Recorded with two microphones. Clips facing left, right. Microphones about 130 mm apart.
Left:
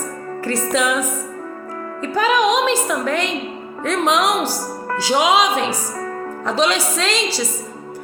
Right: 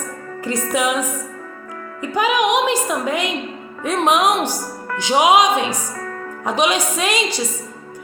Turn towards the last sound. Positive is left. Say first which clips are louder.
# even
turn(degrees=-15)  # may be behind; listen again after turning